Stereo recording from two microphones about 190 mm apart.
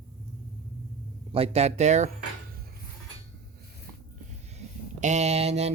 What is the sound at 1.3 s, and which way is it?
Speech, 30° right (ahead or behind).